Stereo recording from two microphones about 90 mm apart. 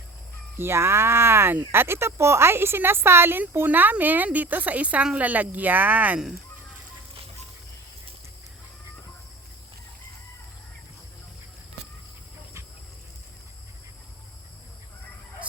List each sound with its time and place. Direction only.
0.6 s speech: 30° right (ahead or behind)